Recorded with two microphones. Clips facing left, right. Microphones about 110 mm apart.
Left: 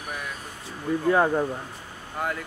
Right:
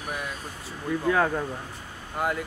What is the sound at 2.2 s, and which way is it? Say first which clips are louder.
Speech: right 2 dB; 5° right (ahead or behind).